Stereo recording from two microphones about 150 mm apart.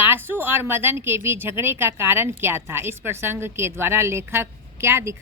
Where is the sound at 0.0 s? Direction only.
15° right (ahead or behind).